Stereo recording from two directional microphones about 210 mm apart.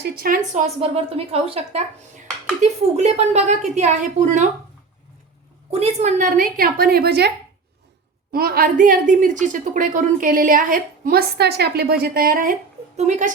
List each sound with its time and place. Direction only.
0.0 s a woman's voice: 45° right (ahead or behind)
0.8 s a woman's voice: 30° right (ahead or behind)
5.7 s a woman's voice: 30° right (ahead or behind)